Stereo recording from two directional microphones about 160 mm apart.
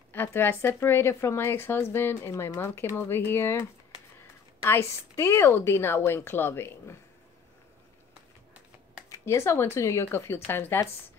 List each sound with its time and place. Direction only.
0.1 s speech: 15° left (ahead or behind)
4.6 s speech: 15° left (ahead or behind)
9.1 s speech: 15° left (ahead or behind)